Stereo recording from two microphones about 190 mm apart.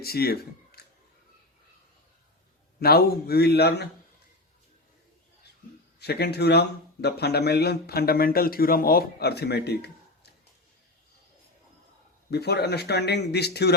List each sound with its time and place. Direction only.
0.0 s speech: 55° left (ahead or behind)
2.8 s a man's voice: 55° left (ahead or behind)
6.0 s a man's voice: 60° left (ahead or behind)
12.3 s a man's voice: 60° left (ahead or behind)